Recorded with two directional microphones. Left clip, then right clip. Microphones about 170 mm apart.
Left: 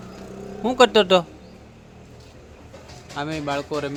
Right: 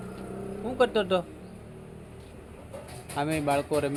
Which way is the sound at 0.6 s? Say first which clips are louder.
Left 10 dB; 40° left (ahead or behind).